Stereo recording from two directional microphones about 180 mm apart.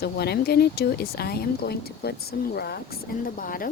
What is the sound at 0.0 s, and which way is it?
Speech, 65° left (ahead or behind).